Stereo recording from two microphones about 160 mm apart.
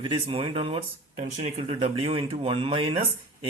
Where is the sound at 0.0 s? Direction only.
35° right (ahead or behind).